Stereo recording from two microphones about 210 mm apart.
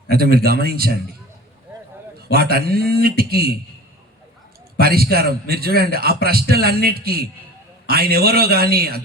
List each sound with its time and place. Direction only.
0.1 s a man's voice: 45° right (ahead or behind)
2.3 s a man's voice: 45° right (ahead or behind)
4.8 s a man's voice: 45° right (ahead or behind)